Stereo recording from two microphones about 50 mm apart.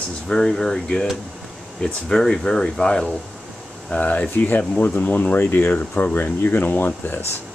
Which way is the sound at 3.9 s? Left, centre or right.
Left.